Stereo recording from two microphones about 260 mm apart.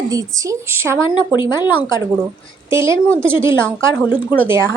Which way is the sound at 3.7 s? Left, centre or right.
Centre.